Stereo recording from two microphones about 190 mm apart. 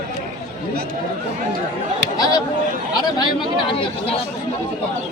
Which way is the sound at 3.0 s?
20° left (ahead or behind).